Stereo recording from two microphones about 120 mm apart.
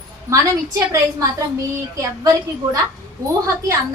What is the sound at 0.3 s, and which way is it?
Speech, 25° right (ahead or behind).